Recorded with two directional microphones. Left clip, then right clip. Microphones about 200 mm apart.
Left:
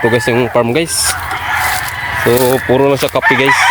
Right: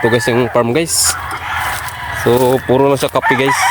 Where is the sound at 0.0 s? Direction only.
10° right (ahead or behind).